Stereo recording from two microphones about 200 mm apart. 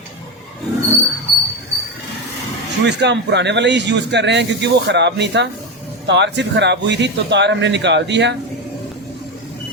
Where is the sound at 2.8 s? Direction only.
60° right (ahead or behind).